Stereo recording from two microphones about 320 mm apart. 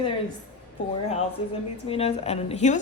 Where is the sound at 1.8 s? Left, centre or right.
Centre.